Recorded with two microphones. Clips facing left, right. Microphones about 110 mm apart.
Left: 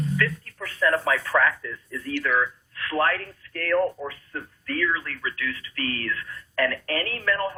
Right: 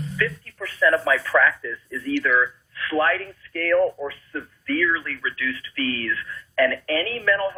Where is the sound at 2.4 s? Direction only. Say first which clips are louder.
Right 2 dB; 35° left (ahead or behind).